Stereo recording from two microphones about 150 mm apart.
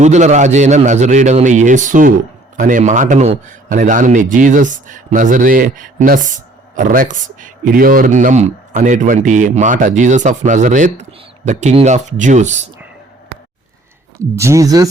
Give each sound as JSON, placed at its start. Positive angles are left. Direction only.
{"t": 0.0, "sound": "a man's voice", "side_deg": -50}
{"t": 14.2, "sound": "speech", "side_deg": -20}